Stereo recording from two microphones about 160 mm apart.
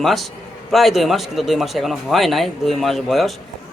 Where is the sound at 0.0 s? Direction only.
Centre (ahead or behind).